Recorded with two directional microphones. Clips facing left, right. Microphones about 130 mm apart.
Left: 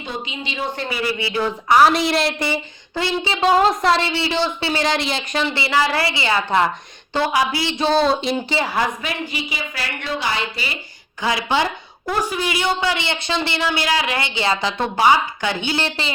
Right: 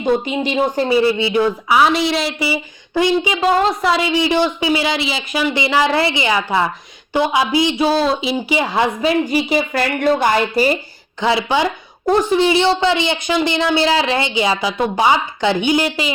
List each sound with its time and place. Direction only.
0.0 s speech: 50° right (ahead or behind)
0.8 s speech: 30° right (ahead or behind)
1.7 s a woman's voice: centre (ahead or behind)
2.9 s speech: 15° right (ahead or behind)
3.5 s speech: centre (ahead or behind); by 9.1 s 25° right (ahead or behind)
9.3 s speech: 50° right (ahead or behind)
11.2 s speech: 25° right (ahead or behind)
13.7 s speech: 25° right (ahead or behind)